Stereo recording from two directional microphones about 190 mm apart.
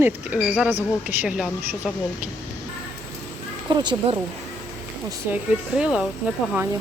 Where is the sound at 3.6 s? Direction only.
25° right (ahead or behind).